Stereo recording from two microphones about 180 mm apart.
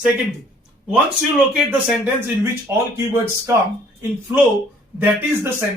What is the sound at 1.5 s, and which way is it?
Speech, centre (ahead or behind).